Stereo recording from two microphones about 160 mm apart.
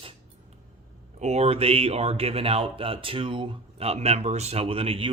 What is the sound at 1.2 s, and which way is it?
Speech, 40° right (ahead or behind).